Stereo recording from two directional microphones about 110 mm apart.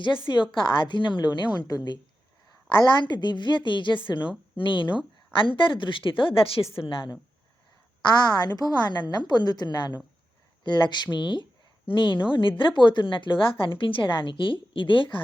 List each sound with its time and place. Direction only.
0.3 s a woman's voice: 35° left (ahead or behind); by 6.7 s 60° left (ahead or behind)
6.8 s a woman's voice: 45° left (ahead or behind)